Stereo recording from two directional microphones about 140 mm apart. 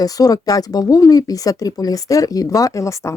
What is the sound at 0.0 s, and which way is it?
Speech, 25° left (ahead or behind).